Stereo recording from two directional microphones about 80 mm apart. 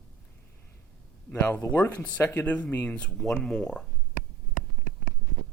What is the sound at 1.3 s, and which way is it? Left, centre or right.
Speech, centre.